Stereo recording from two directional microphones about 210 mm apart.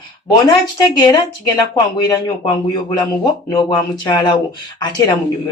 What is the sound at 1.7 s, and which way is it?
Speech, 20° left (ahead or behind).